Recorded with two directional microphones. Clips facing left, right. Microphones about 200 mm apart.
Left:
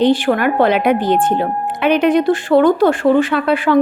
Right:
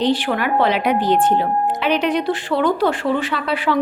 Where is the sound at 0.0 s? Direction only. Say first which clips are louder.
Left 6 dB; 50° left (ahead or behind).